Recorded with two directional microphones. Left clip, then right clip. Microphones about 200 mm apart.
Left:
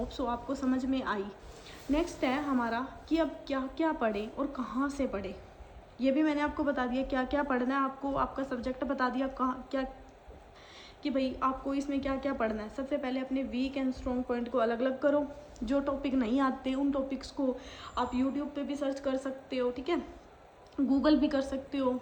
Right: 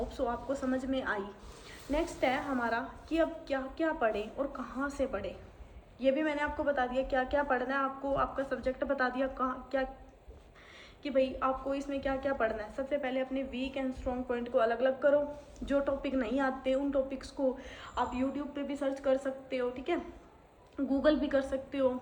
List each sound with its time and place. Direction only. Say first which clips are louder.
0.1 s a woman's voice: even; 15° left (ahead or behind)
11.0 s a woman's voice: right 1 dB; 20° left (ahead or behind)